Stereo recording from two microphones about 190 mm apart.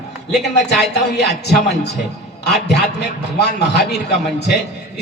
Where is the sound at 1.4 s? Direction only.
60° left (ahead or behind).